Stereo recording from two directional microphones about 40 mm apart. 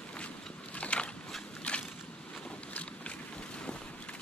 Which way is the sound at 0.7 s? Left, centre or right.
Left.